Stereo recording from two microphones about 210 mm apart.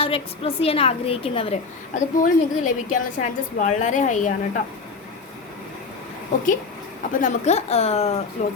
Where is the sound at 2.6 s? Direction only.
35° left (ahead or behind).